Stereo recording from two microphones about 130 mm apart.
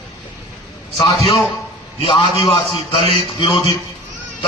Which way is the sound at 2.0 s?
40° left (ahead or behind).